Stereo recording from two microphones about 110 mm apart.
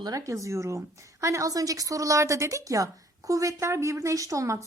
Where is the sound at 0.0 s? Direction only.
30° right (ahead or behind).